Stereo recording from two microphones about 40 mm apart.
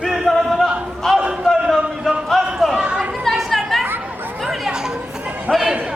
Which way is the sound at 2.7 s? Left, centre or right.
Right.